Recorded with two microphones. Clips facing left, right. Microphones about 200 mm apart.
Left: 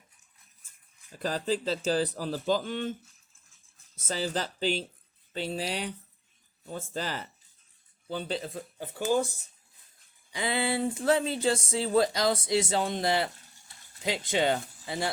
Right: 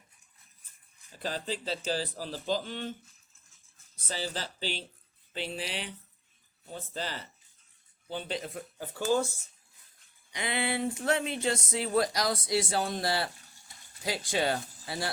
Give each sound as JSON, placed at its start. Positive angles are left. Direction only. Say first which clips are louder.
{"t": 1.2, "sound": "speech", "louder": "left 6 dB", "side_deg": 45}
{"t": 4.4, "sound": "speech", "louder": "left 7 dB", "side_deg": 45}
{"t": 8.3, "sound": "speech", "louder": "left 1 dB", "side_deg": 30}
{"t": 8.8, "sound": "speech", "louder": "left 1 dB", "side_deg": 20}
{"t": 10.3, "sound": "speech", "louder": "left 3 dB", "side_deg": 30}